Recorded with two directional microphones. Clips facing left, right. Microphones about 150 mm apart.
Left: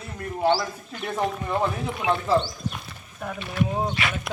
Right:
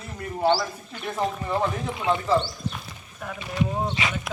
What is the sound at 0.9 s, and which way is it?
Speech, centre (ahead or behind).